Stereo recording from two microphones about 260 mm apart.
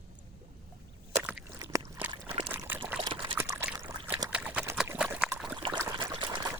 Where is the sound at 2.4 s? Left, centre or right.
Centre.